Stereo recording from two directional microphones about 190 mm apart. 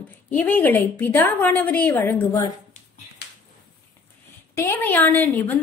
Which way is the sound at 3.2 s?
60° left (ahead or behind).